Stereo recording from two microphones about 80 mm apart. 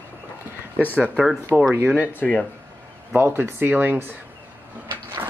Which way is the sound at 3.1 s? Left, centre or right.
Right.